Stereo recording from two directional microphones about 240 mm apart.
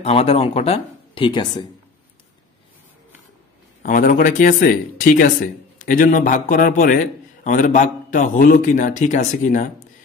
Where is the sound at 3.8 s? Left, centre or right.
Left.